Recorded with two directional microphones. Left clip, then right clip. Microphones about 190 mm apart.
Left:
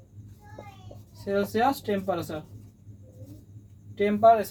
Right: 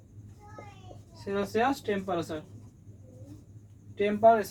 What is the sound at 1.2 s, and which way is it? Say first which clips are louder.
Speech: left 4 dB; 5° right (ahead or behind).